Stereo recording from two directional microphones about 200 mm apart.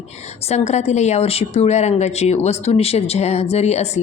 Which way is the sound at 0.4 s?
35° left (ahead or behind).